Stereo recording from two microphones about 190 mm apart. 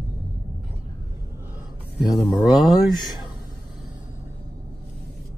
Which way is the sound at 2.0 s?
20° left (ahead or behind).